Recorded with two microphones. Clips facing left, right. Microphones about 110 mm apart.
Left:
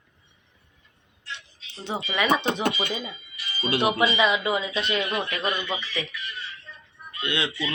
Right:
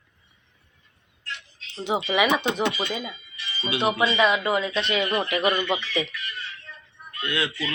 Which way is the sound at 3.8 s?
10° left (ahead or behind).